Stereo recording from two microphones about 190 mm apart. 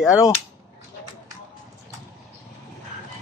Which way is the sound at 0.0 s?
15° left (ahead or behind).